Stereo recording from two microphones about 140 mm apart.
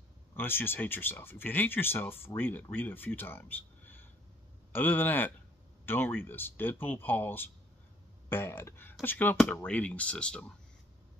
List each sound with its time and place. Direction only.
0.4 s speech: 15° left (ahead or behind)